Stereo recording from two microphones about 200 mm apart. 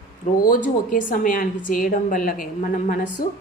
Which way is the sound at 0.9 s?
40° left (ahead or behind).